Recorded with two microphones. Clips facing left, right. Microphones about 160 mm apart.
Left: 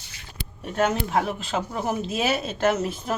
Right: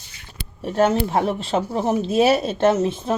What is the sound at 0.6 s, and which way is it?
Speech, 30° right (ahead or behind).